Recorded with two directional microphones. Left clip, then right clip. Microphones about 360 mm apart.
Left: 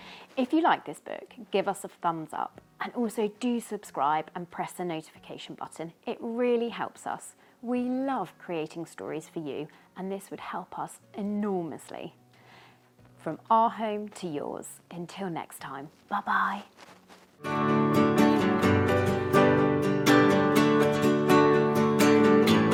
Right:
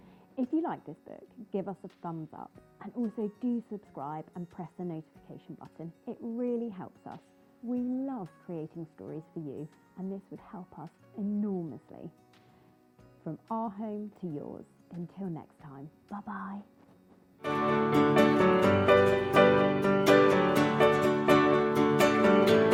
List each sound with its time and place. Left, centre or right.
0.0 s a sound: centre
0.5 s a woman's voice: centre
1.7 s a woman's voice: centre
2.0 s a woman's voice: centre
13.2 s a woman's voice: centre
17.4 s music: centre